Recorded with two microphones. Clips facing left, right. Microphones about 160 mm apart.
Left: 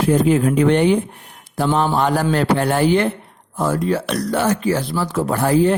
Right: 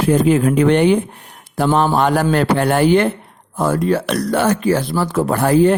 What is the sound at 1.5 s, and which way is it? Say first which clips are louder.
Mantra: right 3 dB; 60° right (ahead or behind).